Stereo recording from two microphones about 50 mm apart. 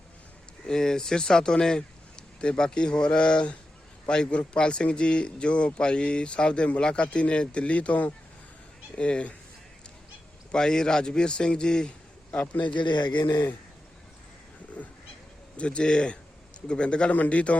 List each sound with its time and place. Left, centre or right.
0.6 s a man's voice: centre
10.5 s a man's voice: centre
12.3 s a man's voice: left
14.8 s a man's voice: centre